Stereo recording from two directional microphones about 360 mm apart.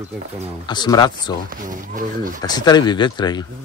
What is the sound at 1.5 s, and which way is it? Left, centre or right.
Speech, right.